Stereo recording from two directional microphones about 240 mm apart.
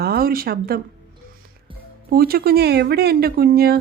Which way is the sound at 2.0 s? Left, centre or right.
Right.